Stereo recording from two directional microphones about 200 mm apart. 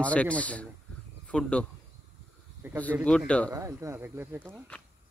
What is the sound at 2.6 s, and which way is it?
Speech, 10° right (ahead or behind).